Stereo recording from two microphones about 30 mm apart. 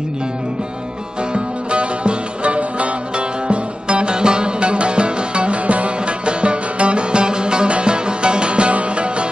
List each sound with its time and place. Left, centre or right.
1.3 s music: right